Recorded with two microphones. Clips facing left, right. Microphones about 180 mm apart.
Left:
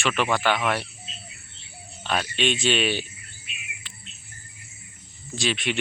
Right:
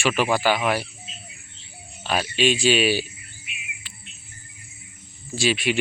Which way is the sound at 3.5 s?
15° right (ahead or behind).